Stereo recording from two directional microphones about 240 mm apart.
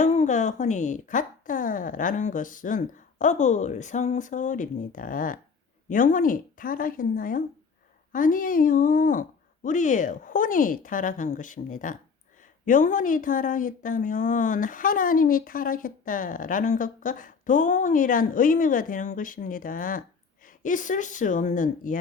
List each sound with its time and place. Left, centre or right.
0.0 s a woman's voice: left